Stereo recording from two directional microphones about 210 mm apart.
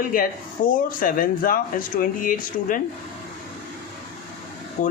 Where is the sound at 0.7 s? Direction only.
40° left (ahead or behind).